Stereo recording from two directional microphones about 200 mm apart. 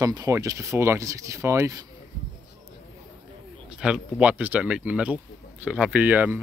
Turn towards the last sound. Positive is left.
turn(degrees=-10)  # may be behind; listen again after turning